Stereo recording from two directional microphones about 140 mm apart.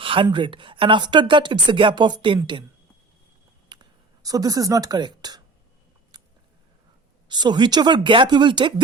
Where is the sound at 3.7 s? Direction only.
30° right (ahead or behind).